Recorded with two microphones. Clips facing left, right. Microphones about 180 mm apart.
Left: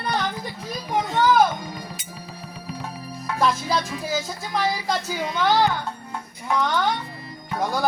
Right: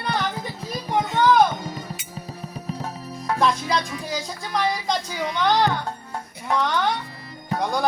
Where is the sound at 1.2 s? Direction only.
5° left (ahead or behind).